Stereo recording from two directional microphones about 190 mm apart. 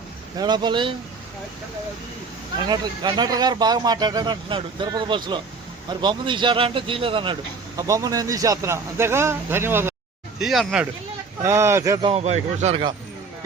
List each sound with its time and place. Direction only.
0.3 s speech: 20° right (ahead or behind)
2.6 s speech: 20° right (ahead or behind)
10.4 s speech: centre (ahead or behind)
11.4 s speech: 15° right (ahead or behind)
12.0 s speech: 35° right (ahead or behind)